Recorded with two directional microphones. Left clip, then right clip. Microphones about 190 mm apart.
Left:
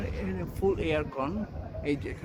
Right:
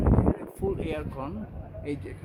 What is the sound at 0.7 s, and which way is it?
Speech, 5° right (ahead or behind).